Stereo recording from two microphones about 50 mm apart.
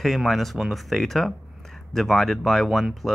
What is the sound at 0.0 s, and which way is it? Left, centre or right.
Speech, centre.